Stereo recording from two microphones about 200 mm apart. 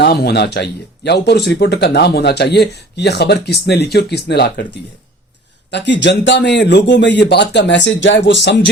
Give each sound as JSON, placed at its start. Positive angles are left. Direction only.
{"t": 0.0, "sound": "speech", "side_deg": 50}